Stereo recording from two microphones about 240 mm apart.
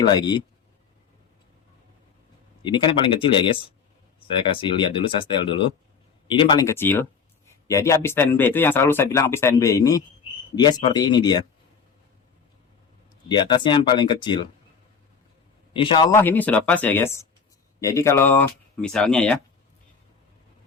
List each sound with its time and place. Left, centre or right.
0.0 s speech: centre
2.6 s speech: centre
13.2 s speech: centre
15.7 s speech: left
16.1 s speech: centre